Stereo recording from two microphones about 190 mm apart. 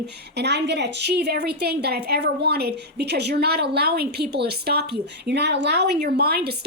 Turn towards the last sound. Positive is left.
turn(degrees=-55)  # may be behind; listen again after turning